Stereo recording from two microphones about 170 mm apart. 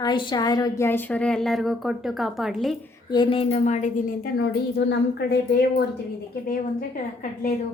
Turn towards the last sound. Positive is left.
turn(degrees=55)  # may be behind; listen again after turning